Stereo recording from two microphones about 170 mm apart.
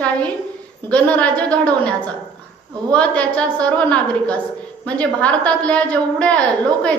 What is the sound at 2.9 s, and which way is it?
A woman's voice, 5° left (ahead or behind).